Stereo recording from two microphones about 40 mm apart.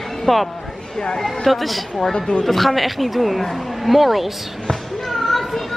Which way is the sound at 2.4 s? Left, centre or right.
Centre.